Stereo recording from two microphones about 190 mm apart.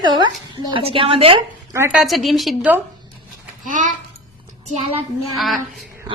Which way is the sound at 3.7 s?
40° right (ahead or behind).